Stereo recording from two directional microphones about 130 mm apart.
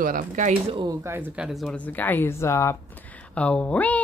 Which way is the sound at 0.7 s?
30° right (ahead or behind).